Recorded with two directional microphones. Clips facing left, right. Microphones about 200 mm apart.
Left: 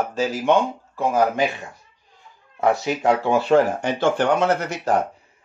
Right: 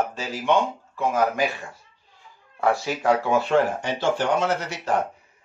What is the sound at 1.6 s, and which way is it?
Speech, 20° left (ahead or behind).